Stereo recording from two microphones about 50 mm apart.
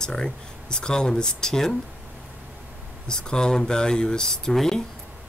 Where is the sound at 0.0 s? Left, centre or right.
Centre.